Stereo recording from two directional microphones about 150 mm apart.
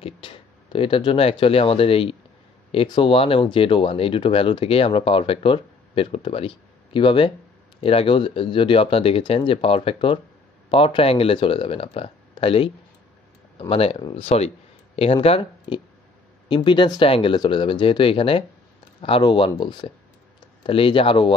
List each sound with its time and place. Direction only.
0.2 s speech: 35° left (ahead or behind)